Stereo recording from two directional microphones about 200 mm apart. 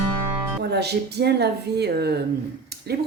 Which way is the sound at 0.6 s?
55° right (ahead or behind).